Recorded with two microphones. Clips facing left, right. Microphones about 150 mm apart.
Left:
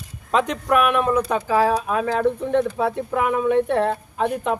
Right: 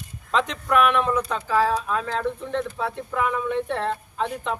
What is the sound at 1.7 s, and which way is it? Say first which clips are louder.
Speech: left 4 dB; 60° left (ahead or behind).